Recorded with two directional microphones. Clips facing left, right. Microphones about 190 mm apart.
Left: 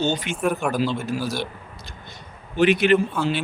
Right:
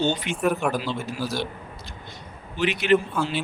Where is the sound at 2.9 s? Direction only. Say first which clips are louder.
Left 1 dB; centre (ahead or behind).